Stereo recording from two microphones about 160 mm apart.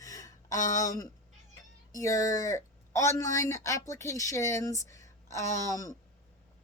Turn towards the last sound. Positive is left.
turn(degrees=20)  # may be behind; listen again after turning